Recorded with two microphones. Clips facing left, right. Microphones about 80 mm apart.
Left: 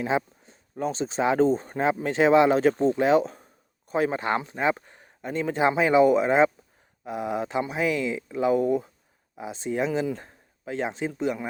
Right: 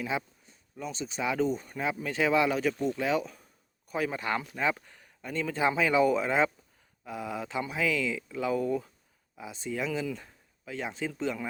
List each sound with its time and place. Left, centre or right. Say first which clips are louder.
0.0 s speech: left 7 dB; left